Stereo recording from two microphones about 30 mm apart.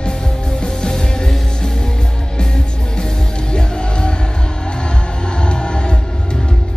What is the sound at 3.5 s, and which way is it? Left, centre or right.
Music, left.